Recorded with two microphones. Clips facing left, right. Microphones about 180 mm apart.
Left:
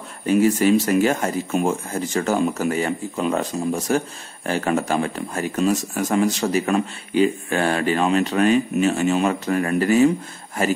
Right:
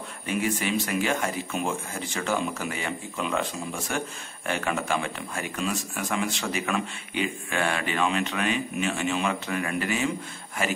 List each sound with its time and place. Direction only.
0.3 s speech: 40° left (ahead or behind)